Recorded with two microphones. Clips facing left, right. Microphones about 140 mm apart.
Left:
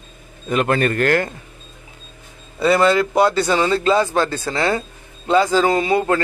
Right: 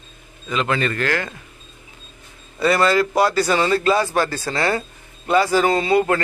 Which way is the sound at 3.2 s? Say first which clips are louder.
Left 2 dB; 20° left (ahead or behind).